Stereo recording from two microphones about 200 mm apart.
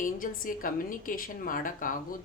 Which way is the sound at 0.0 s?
45° left (ahead or behind).